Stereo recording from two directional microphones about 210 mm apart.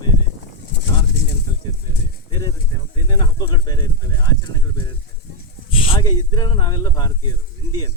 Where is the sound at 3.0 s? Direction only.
20° left (ahead or behind).